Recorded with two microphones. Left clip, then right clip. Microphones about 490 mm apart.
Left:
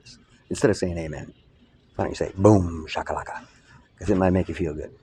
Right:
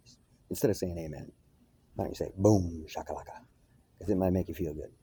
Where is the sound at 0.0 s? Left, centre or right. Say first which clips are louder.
Left 12 dB; right.